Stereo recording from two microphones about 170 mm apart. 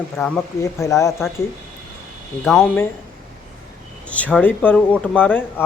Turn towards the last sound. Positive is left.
turn(degrees=10)  # may be behind; listen again after turning